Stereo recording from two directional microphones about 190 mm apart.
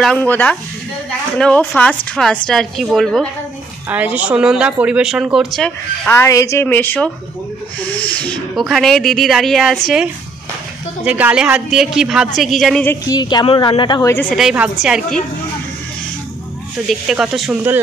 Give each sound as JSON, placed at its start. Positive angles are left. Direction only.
{"t": 0.0, "sound": "a woman's voice", "side_deg": 5}
{"t": 6.0, "sound": "a woman's voice", "side_deg": 15}
{"t": 11.1, "sound": "speech", "side_deg": -10}
{"t": 12.9, "sound": "a woman's voice", "side_deg": 20}
{"t": 14.3, "sound": "speech", "side_deg": -5}
{"t": 16.8, "sound": "speech", "side_deg": -5}